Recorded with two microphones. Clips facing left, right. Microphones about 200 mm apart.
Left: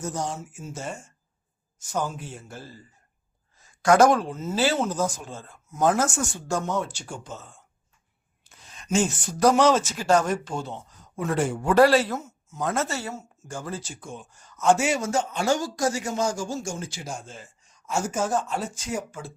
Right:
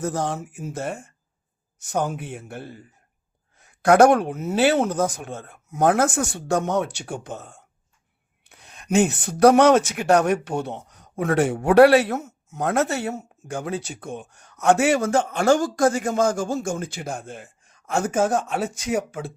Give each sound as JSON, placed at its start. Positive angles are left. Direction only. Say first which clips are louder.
{"t": 0.0, "sound": "speech", "louder": "right 5 dB", "side_deg": -60}